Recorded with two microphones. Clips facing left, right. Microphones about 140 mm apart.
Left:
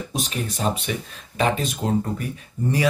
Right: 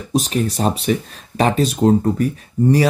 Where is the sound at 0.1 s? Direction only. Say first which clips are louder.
Right 13 dB; 40° right (ahead or behind).